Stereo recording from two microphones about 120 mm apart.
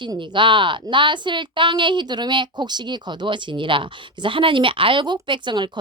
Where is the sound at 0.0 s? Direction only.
40° right (ahead or behind).